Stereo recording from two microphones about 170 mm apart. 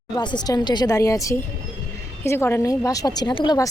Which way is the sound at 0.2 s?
25° left (ahead or behind).